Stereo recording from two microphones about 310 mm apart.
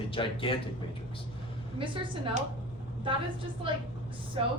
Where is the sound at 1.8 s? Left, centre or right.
Centre.